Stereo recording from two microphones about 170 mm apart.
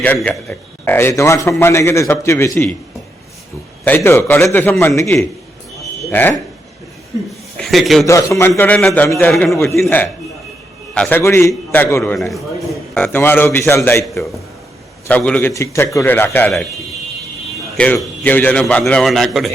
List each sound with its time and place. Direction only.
0.0 s a man's voice: 10° left (ahead or behind)
3.8 s a man's voice: 15° left (ahead or behind)
7.6 s a man's voice: centre (ahead or behind)
8.0 s a man's voice: 15° left (ahead or behind)
9.0 s a man's voice: 15° left (ahead or behind)
9.3 s a man's voice: centre (ahead or behind)
9.6 s a man's voice: 15° left (ahead or behind)
10.9 s a man's voice: 5° left (ahead or behind)
11.2 s a man's voice: 15° left (ahead or behind)
12.3 s a man's voice: centre (ahead or behind)
13.0 s a man's voice: 10° left (ahead or behind)
15.0 s a man's voice: 10° left (ahead or behind)
16.5 s a man's voice: centre (ahead or behind)